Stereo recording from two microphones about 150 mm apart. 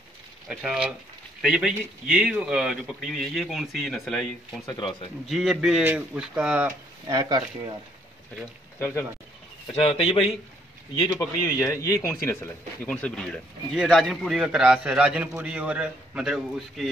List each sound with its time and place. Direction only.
0.5 s a man's voice: 5° right (ahead or behind)
4.6 s a man's voice: 30° left (ahead or behind)
5.2 s a man's voice: centre (ahead or behind)
7.1 s speech: 25° right (ahead or behind)
8.7 s speech: 15° left (ahead or behind)
9.8 s a man's voice: 40° left (ahead or behind)
11.0 s a man's voice: 25° left (ahead or behind)
12.8 s a man's voice: 5° left (ahead or behind)